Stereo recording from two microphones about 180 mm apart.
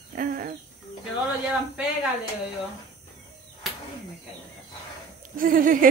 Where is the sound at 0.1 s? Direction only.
50° right (ahead or behind).